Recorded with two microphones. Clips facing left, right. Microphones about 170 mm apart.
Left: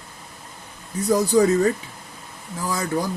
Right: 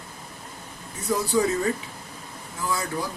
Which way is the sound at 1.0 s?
40° left (ahead or behind).